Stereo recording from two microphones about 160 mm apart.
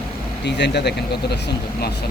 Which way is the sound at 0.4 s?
90° left.